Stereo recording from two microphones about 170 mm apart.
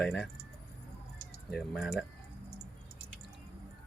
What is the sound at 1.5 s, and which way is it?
Speech, centre (ahead or behind).